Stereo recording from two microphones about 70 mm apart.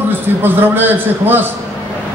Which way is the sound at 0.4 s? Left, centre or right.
Right.